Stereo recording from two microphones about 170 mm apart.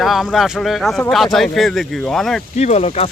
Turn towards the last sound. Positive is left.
turn(degrees=40)  # may be behind; listen again after turning